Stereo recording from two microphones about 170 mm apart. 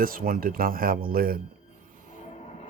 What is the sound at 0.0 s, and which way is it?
Speech, 55° right (ahead or behind).